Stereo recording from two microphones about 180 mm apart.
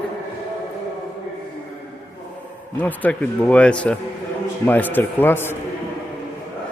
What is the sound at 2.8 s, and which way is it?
A man's voice, 10° left (ahead or behind).